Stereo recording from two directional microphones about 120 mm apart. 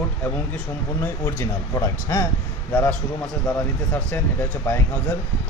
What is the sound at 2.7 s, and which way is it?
Speech, 10° left (ahead or behind).